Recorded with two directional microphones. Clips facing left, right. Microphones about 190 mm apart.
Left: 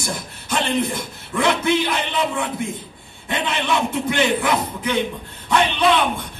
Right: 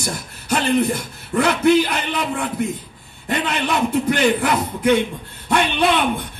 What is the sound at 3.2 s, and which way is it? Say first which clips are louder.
A man's voice: right 1 dB; 40° right (ahead or behind).